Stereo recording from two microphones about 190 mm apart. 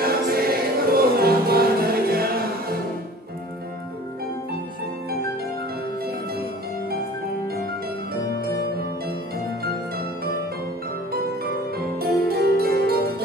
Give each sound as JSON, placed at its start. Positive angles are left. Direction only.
{"t": 0.0, "sound": "music", "side_deg": -50}
{"t": 12.0, "sound": "harpsichord", "side_deg": -55}